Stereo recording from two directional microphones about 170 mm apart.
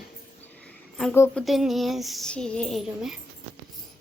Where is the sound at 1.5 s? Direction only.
Centre (ahead or behind).